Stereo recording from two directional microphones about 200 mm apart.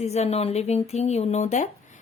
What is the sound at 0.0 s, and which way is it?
Speech, 30° left (ahead or behind).